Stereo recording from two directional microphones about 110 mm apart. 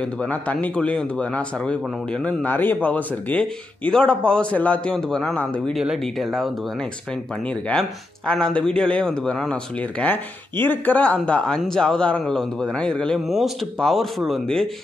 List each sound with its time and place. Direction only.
0.0 s speech: 10° left (ahead or behind)
5.8 s speech: centre (ahead or behind)
7.4 s speech: 10° left (ahead or behind)